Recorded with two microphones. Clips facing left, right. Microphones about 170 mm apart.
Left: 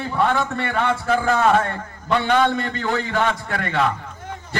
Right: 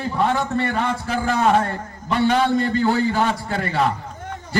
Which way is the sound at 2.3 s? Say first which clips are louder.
Even; 35° right (ahead or behind).